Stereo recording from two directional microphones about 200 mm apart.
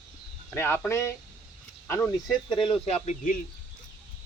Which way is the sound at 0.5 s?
10° left (ahead or behind).